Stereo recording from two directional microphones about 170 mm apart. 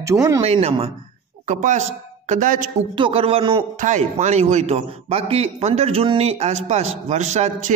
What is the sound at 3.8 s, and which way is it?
A man's voice, 45° right (ahead or behind).